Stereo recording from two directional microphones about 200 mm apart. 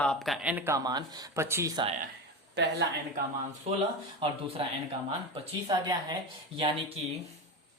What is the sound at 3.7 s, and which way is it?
Speech, 35° right (ahead or behind).